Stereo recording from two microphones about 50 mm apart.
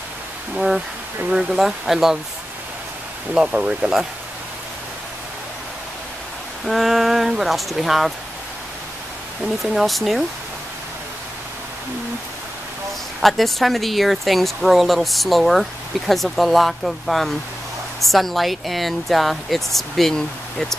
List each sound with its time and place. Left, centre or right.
0.6 s speech: centre
3.3 s speech: centre
6.6 s speech: centre
9.6 s speech: centre
13.2 s speech: centre